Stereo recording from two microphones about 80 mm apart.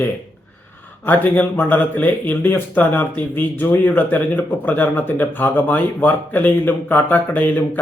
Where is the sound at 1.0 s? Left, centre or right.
Left.